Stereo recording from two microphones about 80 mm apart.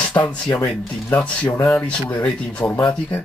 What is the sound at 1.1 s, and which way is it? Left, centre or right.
Speech, centre.